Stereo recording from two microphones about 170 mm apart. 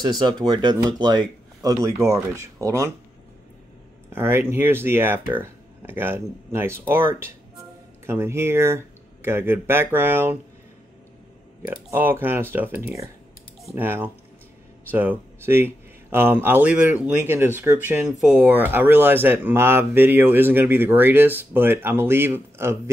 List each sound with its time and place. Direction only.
0.0 s speech: 25° right (ahead or behind)
4.1 s speech: 15° right (ahead or behind)
11.6 s speech: 10° right (ahead or behind)